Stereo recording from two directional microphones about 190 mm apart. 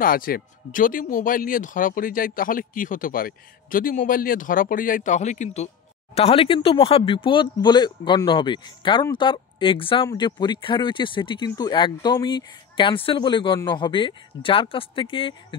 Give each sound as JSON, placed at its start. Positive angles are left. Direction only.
{"t": 0.0, "sound": "speech", "side_deg": 50}